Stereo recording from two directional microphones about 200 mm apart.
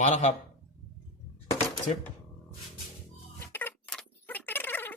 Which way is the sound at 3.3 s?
10° left (ahead or behind).